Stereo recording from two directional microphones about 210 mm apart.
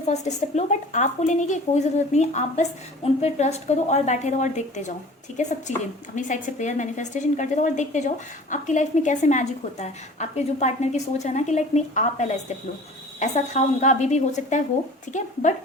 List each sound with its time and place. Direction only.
0.1 s a woman's voice: 30° left (ahead or behind)